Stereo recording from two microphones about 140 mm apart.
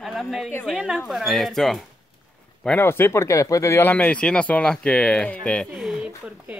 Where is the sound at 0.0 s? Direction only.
Centre (ahead or behind).